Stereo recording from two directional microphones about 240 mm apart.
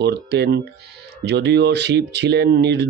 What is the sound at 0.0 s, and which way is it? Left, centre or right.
Speech, right.